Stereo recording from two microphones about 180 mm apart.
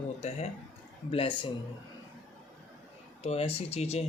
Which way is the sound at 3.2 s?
35° left (ahead or behind).